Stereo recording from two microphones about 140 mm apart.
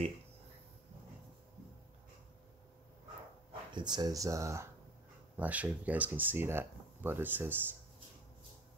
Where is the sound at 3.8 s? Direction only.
30° right (ahead or behind).